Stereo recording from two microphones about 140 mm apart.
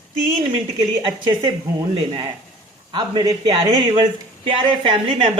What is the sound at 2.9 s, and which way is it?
Speech, 30° right (ahead or behind).